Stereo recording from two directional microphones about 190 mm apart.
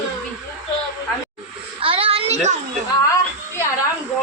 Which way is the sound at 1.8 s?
30° right (ahead or behind).